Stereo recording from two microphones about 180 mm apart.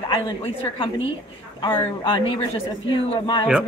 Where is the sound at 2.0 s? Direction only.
30° left (ahead or behind).